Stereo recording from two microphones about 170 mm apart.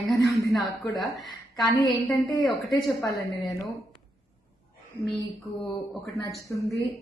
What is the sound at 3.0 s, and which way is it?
Speech, 20° left (ahead or behind).